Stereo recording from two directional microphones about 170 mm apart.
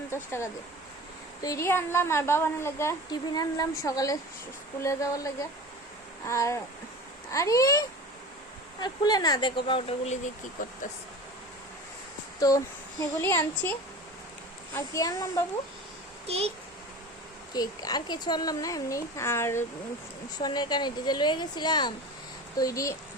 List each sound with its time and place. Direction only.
0.1 s a woman's voice: 15° left (ahead or behind)
10.6 s speech: 55° left (ahead or behind)
12.4 s a child's voice: 20° left (ahead or behind)
16.2 s a child's voice: 35° right (ahead or behind)
17.5 s a child's voice: 25° left (ahead or behind)